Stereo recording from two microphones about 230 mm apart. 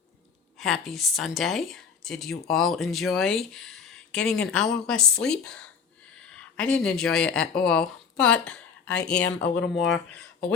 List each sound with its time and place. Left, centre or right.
0.6 s speech: centre
9.2 s speech: left
9.7 s speech: centre